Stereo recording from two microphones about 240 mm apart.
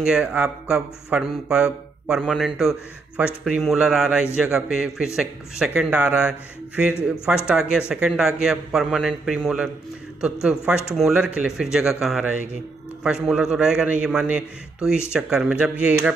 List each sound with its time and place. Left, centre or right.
0.0 s speech: centre